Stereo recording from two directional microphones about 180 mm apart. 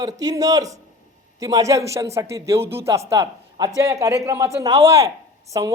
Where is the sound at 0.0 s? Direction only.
20° right (ahead or behind).